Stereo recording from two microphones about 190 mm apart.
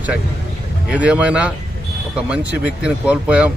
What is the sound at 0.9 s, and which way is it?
A man's voice, 5° right (ahead or behind).